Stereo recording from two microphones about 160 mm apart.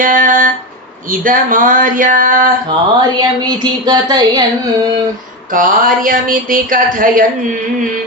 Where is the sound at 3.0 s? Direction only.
25° right (ahead or behind).